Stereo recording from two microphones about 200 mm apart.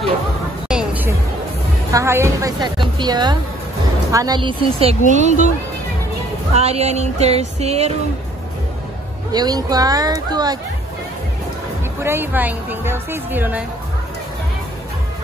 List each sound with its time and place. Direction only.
0.7 s a sound: 5° right (ahead or behind)
1.9 s a woman's voice: 15° right (ahead or behind)
6.5 s music: 30° right (ahead or behind)
9.3 s speech: 20° right (ahead or behind)
12.0 s a woman's voice: 10° right (ahead or behind)